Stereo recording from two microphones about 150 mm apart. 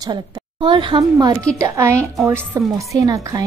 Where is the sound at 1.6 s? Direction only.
20° right (ahead or behind).